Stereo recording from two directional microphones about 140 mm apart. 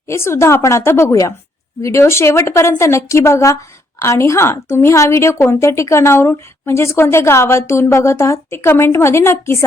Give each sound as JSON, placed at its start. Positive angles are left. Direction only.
{"t": 0.1, "sound": "a woman's voice", "side_deg": 20}